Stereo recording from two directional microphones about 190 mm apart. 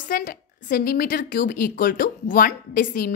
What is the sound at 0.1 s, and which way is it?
A woman's voice, 45° left (ahead or behind).